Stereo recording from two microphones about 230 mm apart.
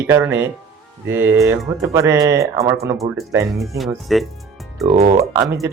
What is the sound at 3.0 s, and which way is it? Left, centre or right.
Speech, centre.